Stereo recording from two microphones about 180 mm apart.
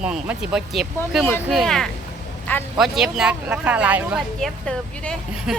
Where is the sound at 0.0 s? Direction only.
5° right (ahead or behind).